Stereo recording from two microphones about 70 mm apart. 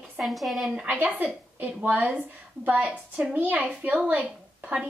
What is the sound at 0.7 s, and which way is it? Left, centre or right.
A woman's voice, centre.